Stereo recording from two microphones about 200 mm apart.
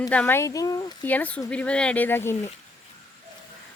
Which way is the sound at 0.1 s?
10° left (ahead or behind).